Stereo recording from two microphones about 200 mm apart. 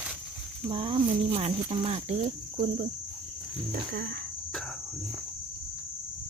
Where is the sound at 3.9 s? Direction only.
50° right (ahead or behind).